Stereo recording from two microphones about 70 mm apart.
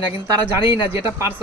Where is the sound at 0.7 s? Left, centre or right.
Right.